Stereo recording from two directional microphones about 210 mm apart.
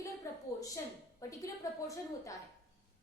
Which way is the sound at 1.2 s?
15° left (ahead or behind).